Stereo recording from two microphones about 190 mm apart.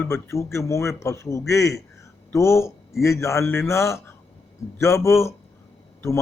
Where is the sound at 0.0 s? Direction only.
15° left (ahead or behind).